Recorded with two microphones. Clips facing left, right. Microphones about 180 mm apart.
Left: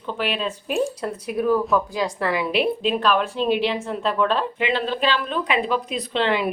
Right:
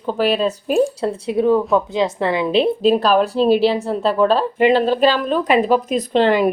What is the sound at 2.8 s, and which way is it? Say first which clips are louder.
Speech: right 7 dB; 40° right (ahead or behind).